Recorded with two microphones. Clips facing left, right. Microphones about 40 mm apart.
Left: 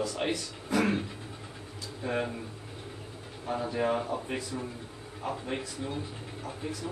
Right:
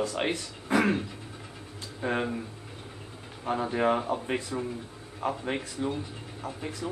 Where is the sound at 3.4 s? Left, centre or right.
Right.